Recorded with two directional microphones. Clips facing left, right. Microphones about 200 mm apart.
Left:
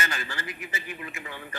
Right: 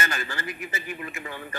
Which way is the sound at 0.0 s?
45° right (ahead or behind).